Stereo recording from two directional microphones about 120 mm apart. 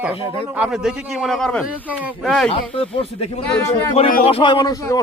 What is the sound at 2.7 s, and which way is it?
A man's voice, 50° left (ahead or behind).